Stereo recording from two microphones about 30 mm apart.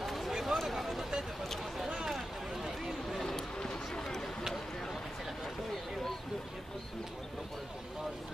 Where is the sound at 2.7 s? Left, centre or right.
Centre.